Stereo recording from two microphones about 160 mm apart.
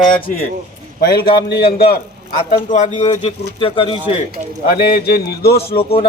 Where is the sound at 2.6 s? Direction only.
50° left (ahead or behind).